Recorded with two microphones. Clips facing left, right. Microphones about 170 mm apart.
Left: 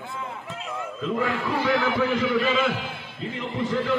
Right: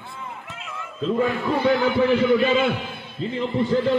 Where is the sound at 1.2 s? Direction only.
90° left.